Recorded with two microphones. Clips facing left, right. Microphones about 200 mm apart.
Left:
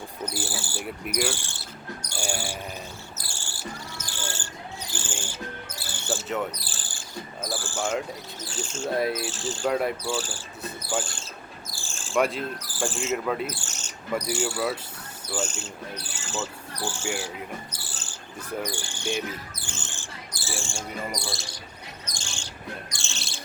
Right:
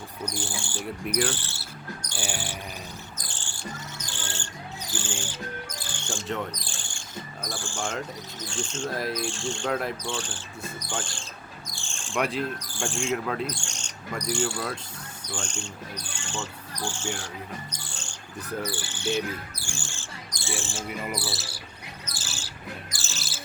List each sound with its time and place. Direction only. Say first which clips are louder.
0.3 s cricket: even; 5° left (ahead or behind)
4.9 s speech: right 3 dB; 10° left (ahead or behind)
5.9 s a sound: left 3 dB; 5° left (ahead or behind)
7.4 s speech: left 4 dB; 5° left (ahead or behind)
14.3 s cricket: right 1 dB; 10° left (ahead or behind)
15.3 s speech: left 5 dB; 5° left (ahead or behind)
18.6 s cricket: right 1 dB; 15° left (ahead or behind)
20.3 s cricket: right 1 dB; centre (ahead or behind)